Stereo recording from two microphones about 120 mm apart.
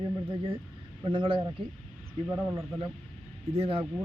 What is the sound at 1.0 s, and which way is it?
Speech, 45° right (ahead or behind).